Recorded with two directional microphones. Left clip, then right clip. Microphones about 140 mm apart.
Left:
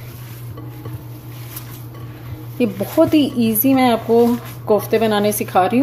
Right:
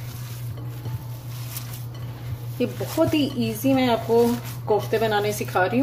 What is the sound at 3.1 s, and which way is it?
Speech, 50° left (ahead or behind).